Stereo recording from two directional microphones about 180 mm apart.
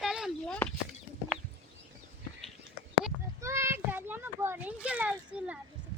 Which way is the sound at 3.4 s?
15° right (ahead or behind).